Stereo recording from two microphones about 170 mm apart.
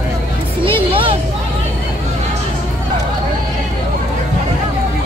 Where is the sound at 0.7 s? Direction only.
30° right (ahead or behind).